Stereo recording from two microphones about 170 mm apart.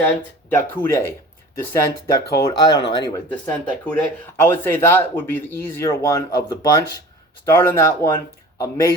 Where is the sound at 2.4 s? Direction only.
25° left (ahead or behind).